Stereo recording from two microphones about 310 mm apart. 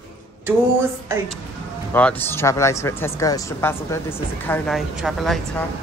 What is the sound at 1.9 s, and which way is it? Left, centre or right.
Speech, centre.